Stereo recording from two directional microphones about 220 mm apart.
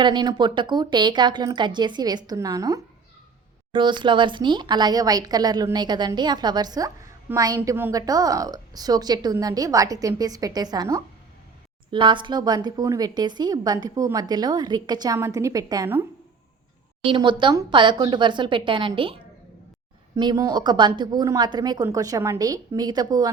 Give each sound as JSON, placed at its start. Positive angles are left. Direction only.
{"t": 0.0, "sound": "a woman's voice", "side_deg": -20}
{"t": 17.1, "sound": "a woman's voice", "side_deg": -20}
{"t": 20.1, "sound": "speech", "side_deg": -15}